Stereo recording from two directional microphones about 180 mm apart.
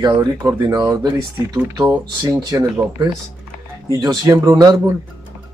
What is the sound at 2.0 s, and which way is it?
A man's voice, 20° right (ahead or behind).